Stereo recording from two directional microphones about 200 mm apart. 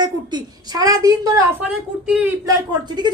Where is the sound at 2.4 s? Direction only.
20° right (ahead or behind).